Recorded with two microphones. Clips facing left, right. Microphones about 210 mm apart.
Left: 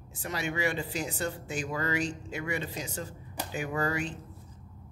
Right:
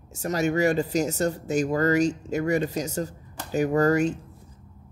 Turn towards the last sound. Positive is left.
turn(degrees=-45)  # may be behind; listen again after turning